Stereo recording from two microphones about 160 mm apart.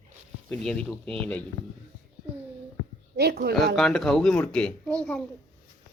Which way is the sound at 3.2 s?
80° right.